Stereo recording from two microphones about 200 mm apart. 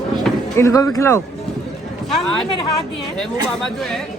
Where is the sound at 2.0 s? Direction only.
Centre (ahead or behind).